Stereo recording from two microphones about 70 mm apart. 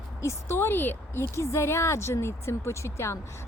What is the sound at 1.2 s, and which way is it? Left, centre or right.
Speech, left.